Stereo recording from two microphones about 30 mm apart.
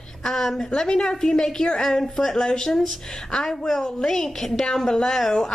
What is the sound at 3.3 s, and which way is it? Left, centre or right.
Speech, centre.